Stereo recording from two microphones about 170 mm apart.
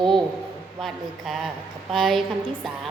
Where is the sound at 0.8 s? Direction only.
Centre (ahead or behind).